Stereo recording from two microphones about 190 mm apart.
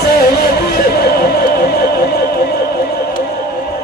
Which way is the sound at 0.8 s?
55° left (ahead or behind).